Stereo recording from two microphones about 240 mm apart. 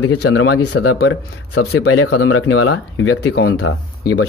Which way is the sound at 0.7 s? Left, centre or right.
Left.